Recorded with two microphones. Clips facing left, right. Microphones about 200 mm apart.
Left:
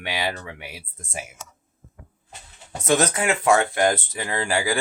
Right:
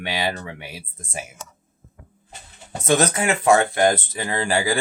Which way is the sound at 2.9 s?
30° right (ahead or behind).